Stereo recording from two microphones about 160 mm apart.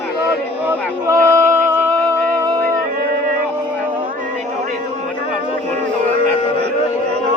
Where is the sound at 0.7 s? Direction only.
15° right (ahead or behind).